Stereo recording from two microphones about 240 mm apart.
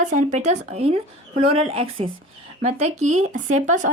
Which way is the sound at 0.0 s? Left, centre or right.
Right.